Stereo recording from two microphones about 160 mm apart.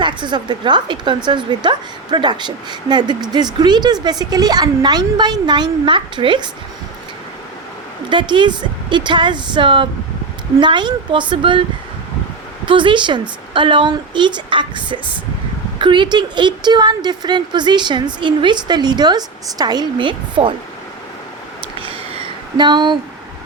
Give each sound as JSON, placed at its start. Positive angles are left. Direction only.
{"t": 0.0, "sound": "a woman's voice", "side_deg": -30}
{"t": 8.1, "sound": "a woman's voice", "side_deg": -30}
{"t": 12.6, "sound": "a woman's voice", "side_deg": -30}
{"t": 21.8, "sound": "a sound", "side_deg": -35}